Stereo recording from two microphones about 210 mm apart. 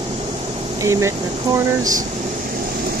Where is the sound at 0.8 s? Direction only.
15° right (ahead or behind).